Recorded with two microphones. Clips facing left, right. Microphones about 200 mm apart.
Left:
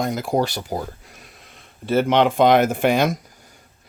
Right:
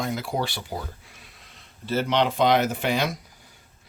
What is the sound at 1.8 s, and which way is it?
Speech, 55° left (ahead or behind).